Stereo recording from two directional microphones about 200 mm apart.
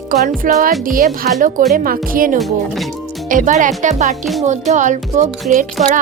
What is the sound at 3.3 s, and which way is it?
Speech, 40° right (ahead or behind).